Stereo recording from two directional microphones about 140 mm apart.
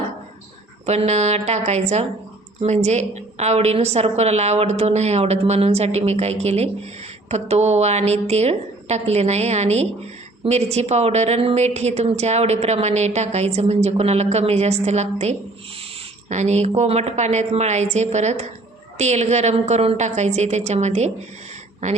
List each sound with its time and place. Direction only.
0.9 s a woman's voice: 50° right (ahead or behind)